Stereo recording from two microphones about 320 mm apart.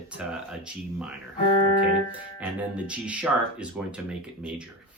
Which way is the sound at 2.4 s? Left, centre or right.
Centre.